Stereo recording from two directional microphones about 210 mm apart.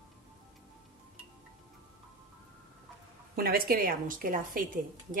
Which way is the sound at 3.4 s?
45° right (ahead or behind).